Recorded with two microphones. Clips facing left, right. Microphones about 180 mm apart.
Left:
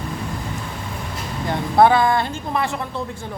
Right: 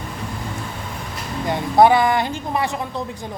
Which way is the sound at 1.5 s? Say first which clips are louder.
Right 1 dB; 15° right (ahead or behind).